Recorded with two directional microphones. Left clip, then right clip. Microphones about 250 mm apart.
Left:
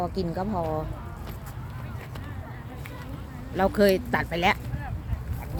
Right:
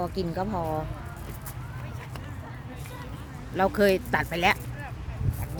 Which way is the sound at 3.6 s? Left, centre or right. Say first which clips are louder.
Left 1 dB; centre.